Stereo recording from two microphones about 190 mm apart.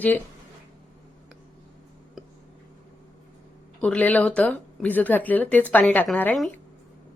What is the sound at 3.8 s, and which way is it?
Speech, 10° left (ahead or behind).